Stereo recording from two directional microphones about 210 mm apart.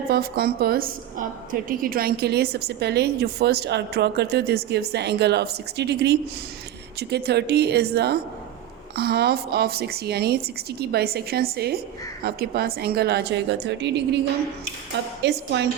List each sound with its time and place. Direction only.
0.1 s a woman's voice: 45° right (ahead or behind)
15.2 s a woman's voice: 55° right (ahead or behind)